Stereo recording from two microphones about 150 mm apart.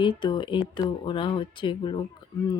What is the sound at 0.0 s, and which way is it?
Speech, 30° left (ahead or behind).